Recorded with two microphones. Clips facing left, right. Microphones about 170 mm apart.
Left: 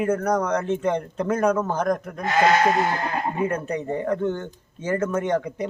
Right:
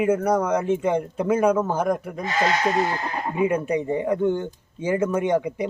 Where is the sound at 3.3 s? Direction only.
10° right (ahead or behind).